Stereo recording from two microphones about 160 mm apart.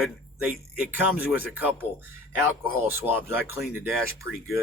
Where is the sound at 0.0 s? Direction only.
10° right (ahead or behind).